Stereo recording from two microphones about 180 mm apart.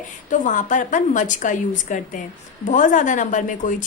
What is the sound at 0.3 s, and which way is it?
A woman's voice, 45° left (ahead or behind).